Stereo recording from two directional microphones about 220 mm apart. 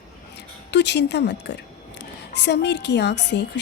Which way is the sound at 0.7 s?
50° left (ahead or behind).